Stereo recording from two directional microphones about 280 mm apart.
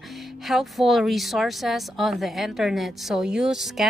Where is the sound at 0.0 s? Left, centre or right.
Centre.